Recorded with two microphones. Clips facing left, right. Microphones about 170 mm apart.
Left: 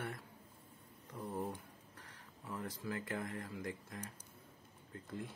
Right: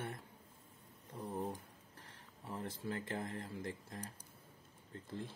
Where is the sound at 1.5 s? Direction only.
30° right (ahead or behind).